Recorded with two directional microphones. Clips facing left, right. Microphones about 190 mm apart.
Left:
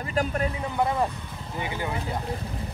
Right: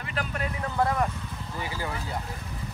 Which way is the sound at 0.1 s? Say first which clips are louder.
Left 6 dB; 40° left (ahead or behind).